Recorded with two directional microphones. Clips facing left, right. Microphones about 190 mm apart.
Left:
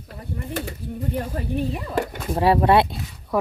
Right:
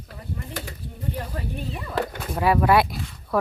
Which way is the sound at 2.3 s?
30° left (ahead or behind).